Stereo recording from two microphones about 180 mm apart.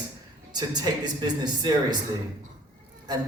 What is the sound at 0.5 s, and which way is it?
A man's voice, 25° right (ahead or behind).